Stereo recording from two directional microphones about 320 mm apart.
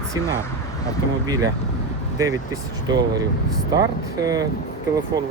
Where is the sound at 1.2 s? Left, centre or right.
Centre.